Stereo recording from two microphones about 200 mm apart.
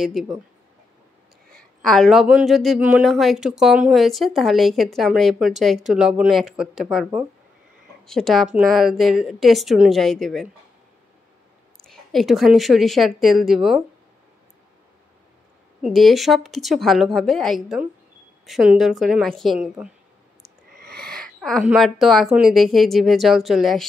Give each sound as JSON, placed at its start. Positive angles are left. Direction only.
{"t": 0.0, "sound": "speech", "side_deg": 0}
{"t": 1.5, "sound": "speech", "side_deg": 5}
{"t": 11.8, "sound": "speech", "side_deg": 0}
{"t": 15.8, "sound": "speech", "side_deg": 0}
{"t": 20.8, "sound": "owl", "side_deg": -50}
{"t": 21.1, "sound": "speech", "side_deg": 0}